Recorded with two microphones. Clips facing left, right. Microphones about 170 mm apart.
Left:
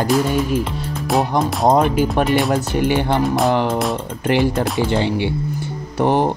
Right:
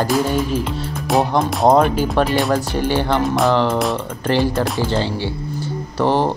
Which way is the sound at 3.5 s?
15° left (ahead or behind).